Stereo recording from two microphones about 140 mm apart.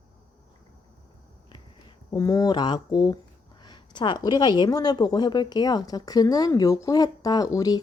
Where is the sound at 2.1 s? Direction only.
25° left (ahead or behind).